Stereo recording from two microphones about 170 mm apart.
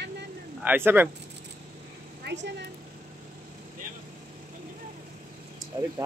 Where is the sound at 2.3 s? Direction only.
90° right.